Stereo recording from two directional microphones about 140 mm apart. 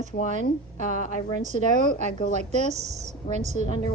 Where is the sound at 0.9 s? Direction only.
65° left (ahead or behind).